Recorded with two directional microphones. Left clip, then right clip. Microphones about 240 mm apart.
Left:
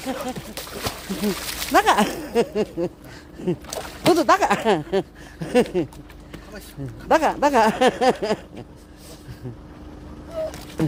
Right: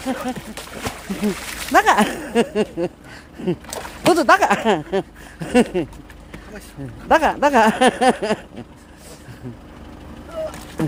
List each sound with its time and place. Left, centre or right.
0.1 s speech: centre
0.5 s speech: centre
1.7 s speech: centre
7.1 s speech: centre
10.8 s a sound: centre